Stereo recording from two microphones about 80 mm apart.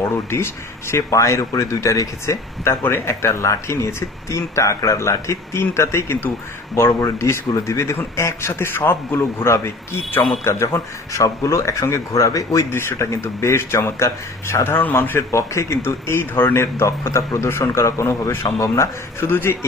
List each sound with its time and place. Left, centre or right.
0.0 s speech: left
12.7 s speech: left